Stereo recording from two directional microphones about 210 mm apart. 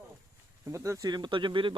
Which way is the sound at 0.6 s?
15° right (ahead or behind).